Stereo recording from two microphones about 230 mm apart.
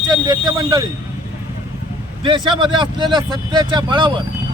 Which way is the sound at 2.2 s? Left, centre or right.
Right.